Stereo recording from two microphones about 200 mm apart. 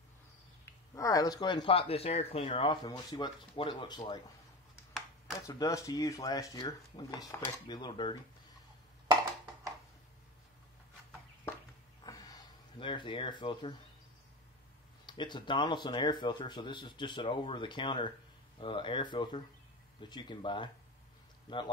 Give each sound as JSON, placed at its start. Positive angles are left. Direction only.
{"t": 0.9, "sound": "speech", "side_deg": 15}
{"t": 5.5, "sound": "speech", "side_deg": 15}
{"t": 12.0, "sound": "a sound", "side_deg": 20}
{"t": 15.0, "sound": "speech", "side_deg": 20}